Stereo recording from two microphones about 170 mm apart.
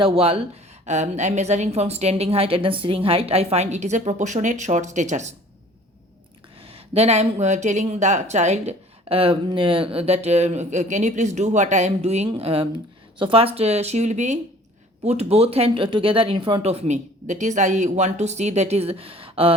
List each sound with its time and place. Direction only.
0.0 s speech: 35° right (ahead or behind)
6.6 s speech: 35° right (ahead or behind)